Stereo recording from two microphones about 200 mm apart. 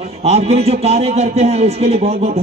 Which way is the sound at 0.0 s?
30° right (ahead or behind).